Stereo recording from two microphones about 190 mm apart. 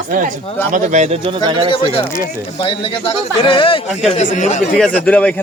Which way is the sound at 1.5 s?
25° right (ahead or behind).